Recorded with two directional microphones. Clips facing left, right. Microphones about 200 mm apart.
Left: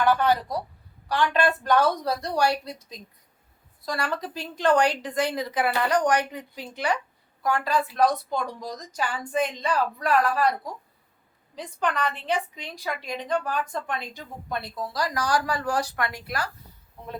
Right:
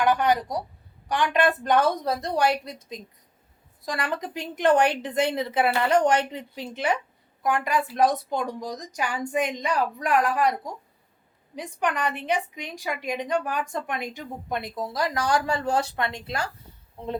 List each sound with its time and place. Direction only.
0.0 s a woman's voice: 15° right (ahead or behind)